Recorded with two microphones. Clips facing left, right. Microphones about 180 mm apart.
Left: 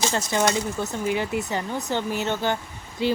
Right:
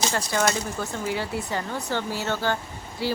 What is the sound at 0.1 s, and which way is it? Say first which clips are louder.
Speech: left 2 dB; 20° left (ahead or behind).